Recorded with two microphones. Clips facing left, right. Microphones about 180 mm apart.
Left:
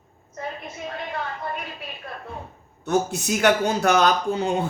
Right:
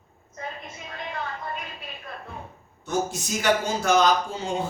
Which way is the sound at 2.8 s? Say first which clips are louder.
Left 5 dB; 60° left (ahead or behind).